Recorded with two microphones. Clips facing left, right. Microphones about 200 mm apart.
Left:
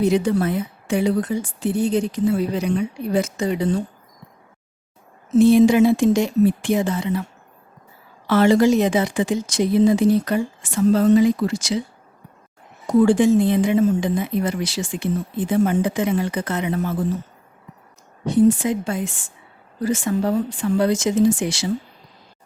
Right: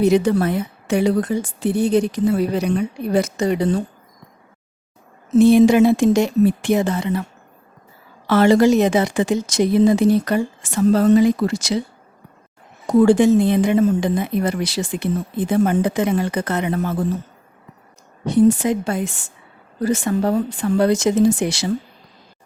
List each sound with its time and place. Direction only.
0.0 s speech: 80° right
2.2 s speech: 55° right (ahead or behind)
5.4 s speech: 70° right (ahead or behind)
8.3 s speech: 70° right (ahead or behind)
13.0 s speech: 65° right (ahead or behind)
18.5 s speech: 70° right (ahead or behind)